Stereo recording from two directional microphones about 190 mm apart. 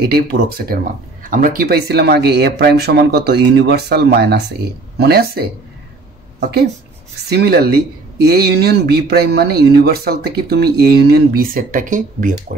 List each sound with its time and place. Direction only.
0.0 s speech: 55° right (ahead or behind)